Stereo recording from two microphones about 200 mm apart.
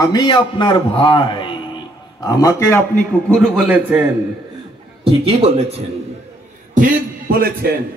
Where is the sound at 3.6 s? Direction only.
10° right (ahead or behind).